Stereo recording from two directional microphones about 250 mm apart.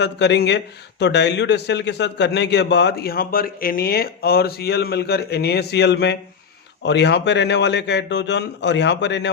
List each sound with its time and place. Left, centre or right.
0.0 s a man's voice: left